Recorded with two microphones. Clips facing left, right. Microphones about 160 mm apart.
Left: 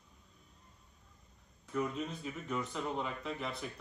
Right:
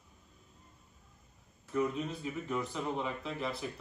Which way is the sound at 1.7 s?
Centre (ahead or behind).